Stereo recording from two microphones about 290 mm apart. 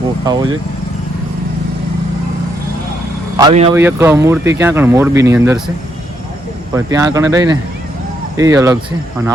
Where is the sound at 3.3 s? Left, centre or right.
Centre.